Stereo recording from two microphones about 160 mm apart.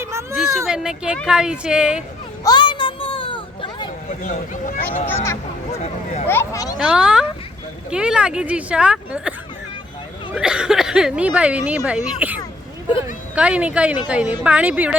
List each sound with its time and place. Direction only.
0.0 s a sound: 15° right (ahead or behind)
0.3 s speech: 5° right (ahead or behind)
2.4 s a sound: 25° left (ahead or behind)
4.2 s speech: 55° left (ahead or behind)
5.0 s speech: 15° left (ahead or behind)
5.7 s speech: 45° left (ahead or behind)
6.2 s speech: 15° left (ahead or behind)
6.7 s speech: 5° right (ahead or behind)
10.3 s a woman's voice: 5° right (ahead or behind)